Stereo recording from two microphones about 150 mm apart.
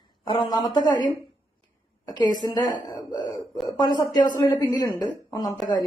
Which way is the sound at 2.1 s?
30° left (ahead or behind).